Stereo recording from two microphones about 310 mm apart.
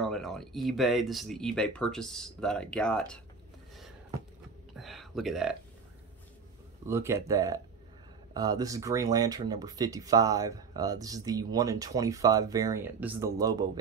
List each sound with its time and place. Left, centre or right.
0.0 s speech: centre
4.7 s a sound: centre
6.9 s speech: centre